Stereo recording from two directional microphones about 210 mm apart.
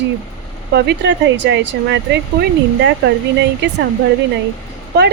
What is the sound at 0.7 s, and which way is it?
Speech, 55° right (ahead or behind).